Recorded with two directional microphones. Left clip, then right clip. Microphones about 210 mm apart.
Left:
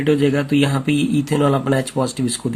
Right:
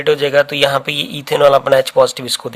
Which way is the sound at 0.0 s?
45° right (ahead or behind).